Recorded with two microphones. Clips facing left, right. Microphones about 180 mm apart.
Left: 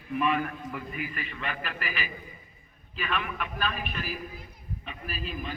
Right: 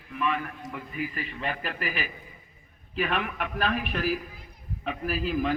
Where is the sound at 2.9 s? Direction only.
60° right (ahead or behind); by 4.1 s 90° right.